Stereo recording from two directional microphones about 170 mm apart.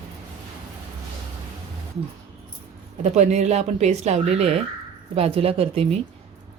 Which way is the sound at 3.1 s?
40° right (ahead or behind).